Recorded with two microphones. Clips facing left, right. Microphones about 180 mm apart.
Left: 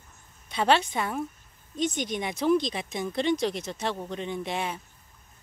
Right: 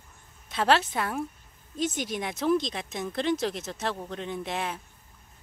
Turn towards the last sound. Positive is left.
turn(degrees=0)  # may be behind; listen again after turning